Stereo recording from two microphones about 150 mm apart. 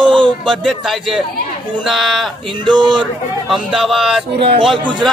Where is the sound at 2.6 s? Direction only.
30° right (ahead or behind).